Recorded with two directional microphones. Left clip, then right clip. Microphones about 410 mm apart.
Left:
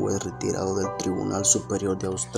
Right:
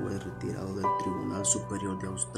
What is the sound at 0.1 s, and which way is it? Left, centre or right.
Speech, right.